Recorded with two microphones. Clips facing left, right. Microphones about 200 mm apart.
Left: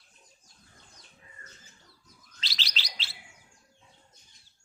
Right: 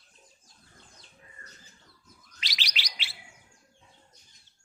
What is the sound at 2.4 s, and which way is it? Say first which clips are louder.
Bird: even; 15° right (ahead or behind).